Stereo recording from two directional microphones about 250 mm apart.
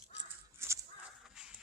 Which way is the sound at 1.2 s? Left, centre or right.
Centre.